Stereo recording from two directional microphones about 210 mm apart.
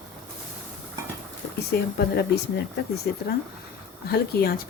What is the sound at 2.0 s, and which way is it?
A woman's voice, 50° left (ahead or behind).